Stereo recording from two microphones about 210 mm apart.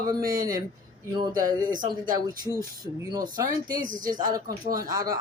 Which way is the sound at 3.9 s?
40° right (ahead or behind).